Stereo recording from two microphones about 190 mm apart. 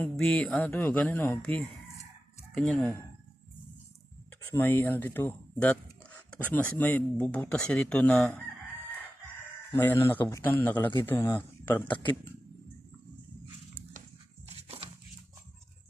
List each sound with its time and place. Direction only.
0.0 s speech: 5° left (ahead or behind)
4.5 s speech: 10° left (ahead or behind)
9.7 s speech: 10° left (ahead or behind)
14.4 s a sound: 30° right (ahead or behind)